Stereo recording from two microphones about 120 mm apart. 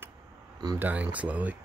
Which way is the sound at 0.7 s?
15° right (ahead or behind).